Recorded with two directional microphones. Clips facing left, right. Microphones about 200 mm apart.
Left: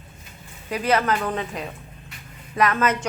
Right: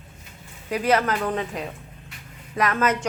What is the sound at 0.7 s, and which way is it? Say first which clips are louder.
A woman's voice: even; 45° right (ahead or behind).